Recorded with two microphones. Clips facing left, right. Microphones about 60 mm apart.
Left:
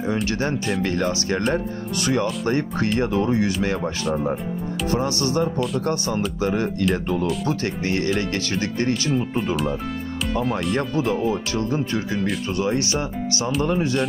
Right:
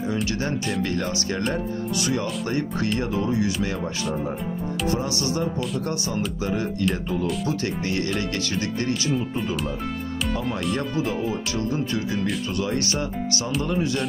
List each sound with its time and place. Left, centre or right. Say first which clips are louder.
0.1 s speech: left 4 dB; left
4.9 s speech: left 8 dB; left
11.1 s speech: left 4 dB; left